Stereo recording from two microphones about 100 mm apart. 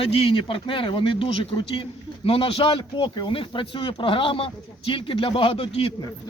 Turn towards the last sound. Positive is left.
turn(degrees=65)  # may be behind; listen again after turning